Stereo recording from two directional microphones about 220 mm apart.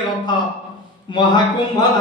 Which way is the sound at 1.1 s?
20° left (ahead or behind).